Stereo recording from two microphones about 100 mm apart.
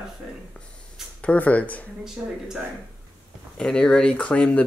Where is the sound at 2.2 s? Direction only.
10° right (ahead or behind).